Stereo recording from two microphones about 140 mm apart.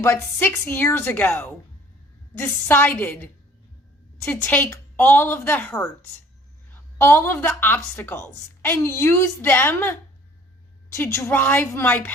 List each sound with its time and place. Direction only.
0.0 s a woman's voice: 20° left (ahead or behind)
4.3 s a woman's voice: 15° left (ahead or behind)
10.9 s a woman's voice: 15° left (ahead or behind)